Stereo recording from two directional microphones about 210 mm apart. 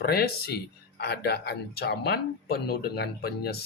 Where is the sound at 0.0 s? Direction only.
45° left (ahead or behind).